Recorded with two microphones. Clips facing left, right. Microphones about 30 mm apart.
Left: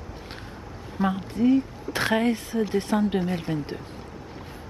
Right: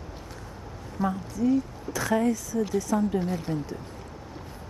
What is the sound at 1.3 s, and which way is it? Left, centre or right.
Speech, left.